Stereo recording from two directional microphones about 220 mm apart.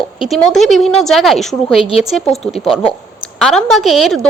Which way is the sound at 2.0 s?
Centre (ahead or behind).